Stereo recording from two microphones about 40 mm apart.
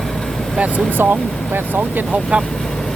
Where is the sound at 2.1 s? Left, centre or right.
Right.